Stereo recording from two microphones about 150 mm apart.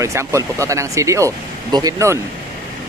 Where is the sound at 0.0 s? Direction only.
20° right (ahead or behind).